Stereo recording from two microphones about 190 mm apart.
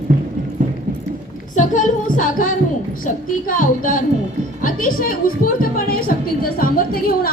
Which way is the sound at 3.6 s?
45° left (ahead or behind).